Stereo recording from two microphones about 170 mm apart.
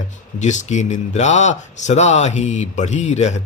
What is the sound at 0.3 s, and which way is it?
Speech, 45° left (ahead or behind).